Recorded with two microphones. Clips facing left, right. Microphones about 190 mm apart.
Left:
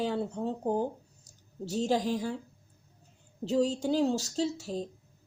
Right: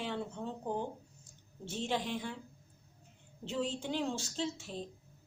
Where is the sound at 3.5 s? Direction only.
40° left (ahead or behind).